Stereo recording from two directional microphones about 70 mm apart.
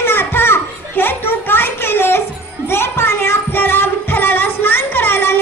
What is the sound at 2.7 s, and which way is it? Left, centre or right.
Music, left.